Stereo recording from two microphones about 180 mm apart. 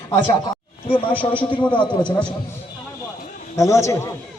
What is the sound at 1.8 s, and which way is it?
Speech, 25° left (ahead or behind).